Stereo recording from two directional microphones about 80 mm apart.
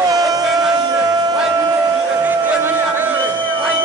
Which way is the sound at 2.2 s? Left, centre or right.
Right.